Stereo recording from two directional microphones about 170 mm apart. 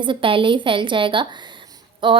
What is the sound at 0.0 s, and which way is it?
A woman's voice, 30° right (ahead or behind).